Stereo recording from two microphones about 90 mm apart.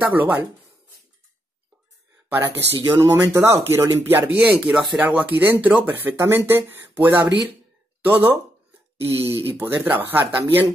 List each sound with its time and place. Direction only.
0.0 s speech: 20° right (ahead or behind)
2.3 s speech: 25° right (ahead or behind)